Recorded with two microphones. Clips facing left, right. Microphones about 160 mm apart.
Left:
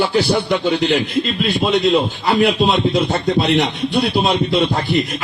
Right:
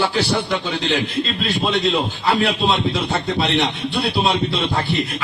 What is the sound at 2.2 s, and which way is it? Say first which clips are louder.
Speech: left 4 dB; 40° left (ahead or behind).